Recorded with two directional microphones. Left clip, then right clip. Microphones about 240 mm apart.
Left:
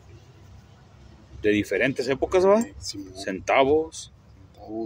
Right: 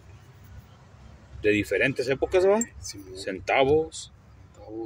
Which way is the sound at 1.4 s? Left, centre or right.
Centre.